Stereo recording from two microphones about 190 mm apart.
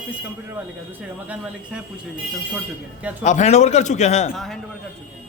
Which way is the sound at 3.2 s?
40° left (ahead or behind).